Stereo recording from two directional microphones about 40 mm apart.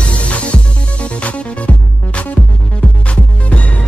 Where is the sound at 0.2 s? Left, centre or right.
Left.